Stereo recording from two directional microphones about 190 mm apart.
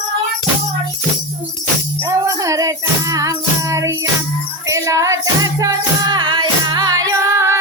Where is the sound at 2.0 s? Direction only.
15° right (ahead or behind).